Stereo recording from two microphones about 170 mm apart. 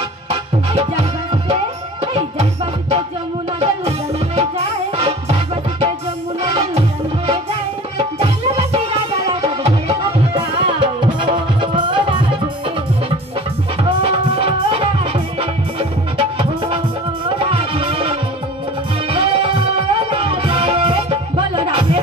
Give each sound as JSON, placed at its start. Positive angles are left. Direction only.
{"t": 0.3, "sound": "music", "side_deg": -35}
{"t": 8.2, "sound": "music", "side_deg": -35}
{"t": 13.8, "sound": "music", "side_deg": -30}